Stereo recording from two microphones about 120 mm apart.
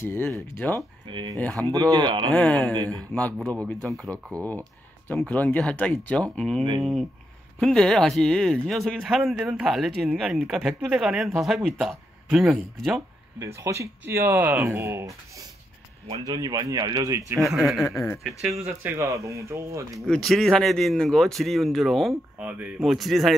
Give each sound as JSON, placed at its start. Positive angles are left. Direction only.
{"t": 0.0, "sound": "speech", "side_deg": 20}
{"t": 1.0, "sound": "speech", "side_deg": -40}
{"t": 2.3, "sound": "speech", "side_deg": 5}
{"t": 2.7, "sound": "speech", "side_deg": -35}
{"t": 3.0, "sound": "speech", "side_deg": 10}
{"t": 13.4, "sound": "speech", "side_deg": -25}
{"t": 17.6, "sound": "speech", "side_deg": 0}
{"t": 17.8, "sound": "speech", "side_deg": 25}
{"t": 18.2, "sound": "speech", "side_deg": -5}
{"t": 18.9, "sound": "speech", "side_deg": -25}
{"t": 20.1, "sound": "speech", "side_deg": 5}
{"t": 22.4, "sound": "speech", "side_deg": -15}
{"t": 22.8, "sound": "speech", "side_deg": 0}